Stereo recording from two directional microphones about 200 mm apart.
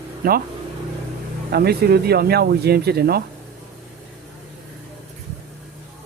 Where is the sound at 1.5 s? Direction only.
50° right (ahead or behind).